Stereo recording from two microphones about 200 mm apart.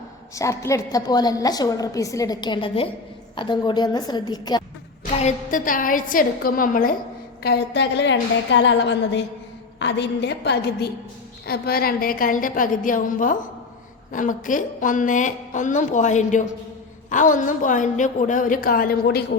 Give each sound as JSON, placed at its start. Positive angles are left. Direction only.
{"t": 0.3, "sound": "a woman's voice", "side_deg": 15}
{"t": 5.2, "sound": "a woman's voice", "side_deg": 40}
{"t": 7.4, "sound": "a woman's voice", "side_deg": 55}